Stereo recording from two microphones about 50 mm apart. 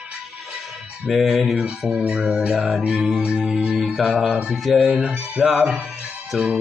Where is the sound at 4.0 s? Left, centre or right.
Centre.